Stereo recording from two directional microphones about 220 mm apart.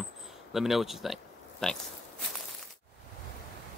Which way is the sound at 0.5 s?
Centre (ahead or behind).